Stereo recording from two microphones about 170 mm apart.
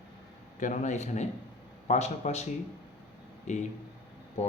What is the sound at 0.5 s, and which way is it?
Speech, 45° left (ahead or behind).